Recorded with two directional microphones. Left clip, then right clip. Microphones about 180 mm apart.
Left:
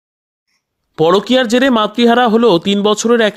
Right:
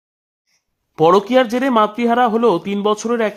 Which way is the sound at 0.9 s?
20° left (ahead or behind).